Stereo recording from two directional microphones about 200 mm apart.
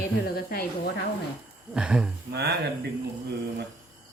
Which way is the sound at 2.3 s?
55° right (ahead or behind).